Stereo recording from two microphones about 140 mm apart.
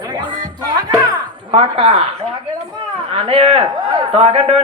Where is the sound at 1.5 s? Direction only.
40° right (ahead or behind).